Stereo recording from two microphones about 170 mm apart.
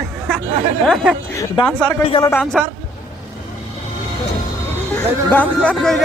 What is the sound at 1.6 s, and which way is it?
Speech, 30° left (ahead or behind).